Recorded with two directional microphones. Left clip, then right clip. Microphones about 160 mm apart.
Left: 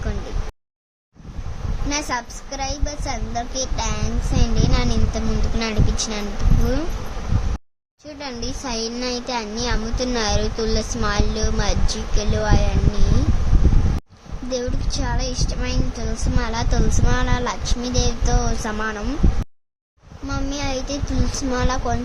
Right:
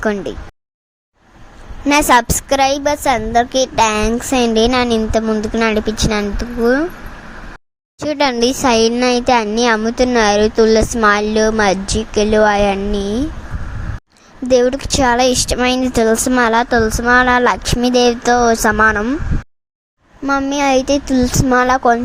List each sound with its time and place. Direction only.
1.9 s a woman's voice: 80° right; by 6.2 s 50° right (ahead or behind)
7.9 s speech: 70° right (ahead or behind); by 13.0 s 55° right (ahead or behind)
14.5 s speech: 65° right (ahead or behind); by 19.0 s 50° right (ahead or behind)
20.2 s speech: 55° right (ahead or behind)